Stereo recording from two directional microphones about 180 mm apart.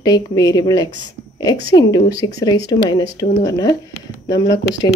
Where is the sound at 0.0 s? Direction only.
20° left (ahead or behind).